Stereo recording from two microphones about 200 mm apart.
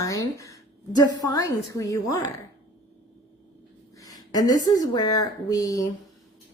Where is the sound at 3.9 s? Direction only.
20° left (ahead or behind).